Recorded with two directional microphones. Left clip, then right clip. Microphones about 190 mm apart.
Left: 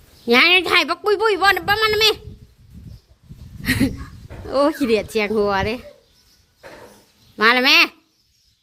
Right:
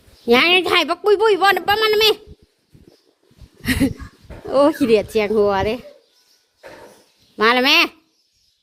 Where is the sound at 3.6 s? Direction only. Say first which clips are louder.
Even; 25° right (ahead or behind).